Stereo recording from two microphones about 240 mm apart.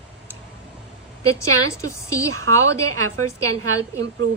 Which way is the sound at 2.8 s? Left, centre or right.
Right.